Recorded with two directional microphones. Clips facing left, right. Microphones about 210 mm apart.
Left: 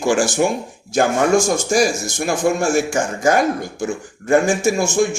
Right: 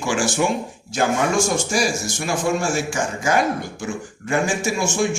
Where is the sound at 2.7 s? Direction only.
45° left (ahead or behind).